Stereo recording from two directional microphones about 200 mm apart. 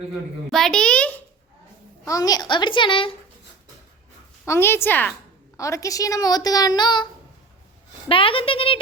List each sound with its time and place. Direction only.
0.5 s a child's voice: 5° left (ahead or behind)
2.0 s speech: 15° left (ahead or behind)
4.4 s a woman's voice: 10° left (ahead or behind)